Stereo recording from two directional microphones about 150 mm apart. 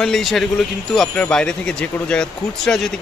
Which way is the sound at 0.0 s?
Centre (ahead or behind).